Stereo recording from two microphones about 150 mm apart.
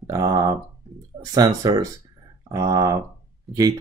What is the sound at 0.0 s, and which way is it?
Speech, 25° right (ahead or behind).